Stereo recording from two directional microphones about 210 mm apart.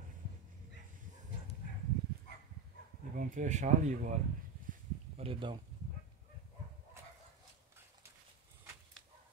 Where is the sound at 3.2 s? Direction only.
35° right (ahead or behind).